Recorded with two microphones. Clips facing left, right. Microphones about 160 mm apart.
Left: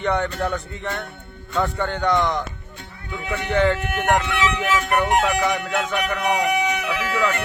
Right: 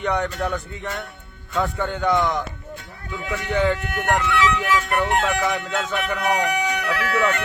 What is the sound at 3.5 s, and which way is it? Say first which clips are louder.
Speech: left 2 dB; centre (ahead or behind).